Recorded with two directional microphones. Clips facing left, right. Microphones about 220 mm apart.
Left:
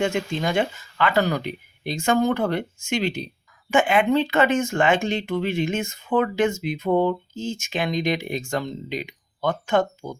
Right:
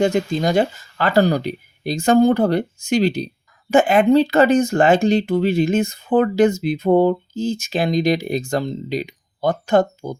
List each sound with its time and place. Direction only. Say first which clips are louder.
0.0 s speech: right 6 dB; 35° right (ahead or behind)